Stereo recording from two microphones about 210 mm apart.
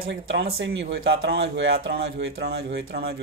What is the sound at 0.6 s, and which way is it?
Speech, 55° right (ahead or behind).